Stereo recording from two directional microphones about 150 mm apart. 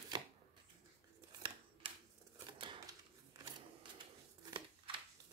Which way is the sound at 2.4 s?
30° right (ahead or behind).